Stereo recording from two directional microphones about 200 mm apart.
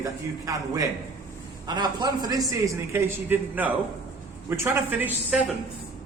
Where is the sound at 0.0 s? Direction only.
15° right (ahead or behind).